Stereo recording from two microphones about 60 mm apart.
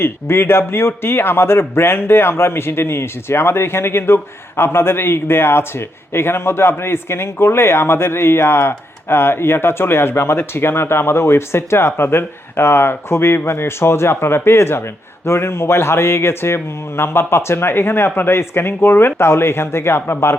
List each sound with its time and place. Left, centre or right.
0.0 s a man's voice: left